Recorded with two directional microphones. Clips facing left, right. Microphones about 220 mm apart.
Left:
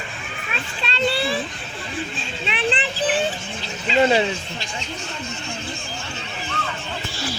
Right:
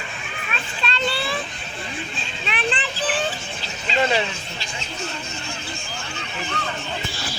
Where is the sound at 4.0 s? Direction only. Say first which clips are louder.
Left 4 dB; 25° left (ahead or behind).